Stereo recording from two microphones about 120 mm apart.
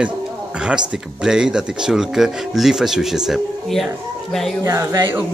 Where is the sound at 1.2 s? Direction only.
5° right (ahead or behind).